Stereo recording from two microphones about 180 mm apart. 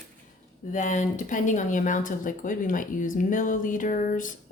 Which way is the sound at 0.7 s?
45° left (ahead or behind).